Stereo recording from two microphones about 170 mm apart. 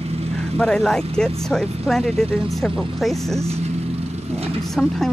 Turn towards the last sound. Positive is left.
turn(degrees=0)  # may be behind; listen again after turning